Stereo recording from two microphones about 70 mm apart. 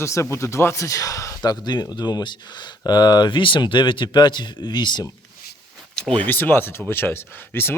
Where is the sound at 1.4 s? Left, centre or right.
Left.